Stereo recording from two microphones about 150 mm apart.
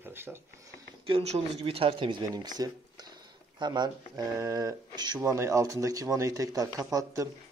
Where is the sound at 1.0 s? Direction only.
40° right (ahead or behind); by 7.3 s 20° right (ahead or behind).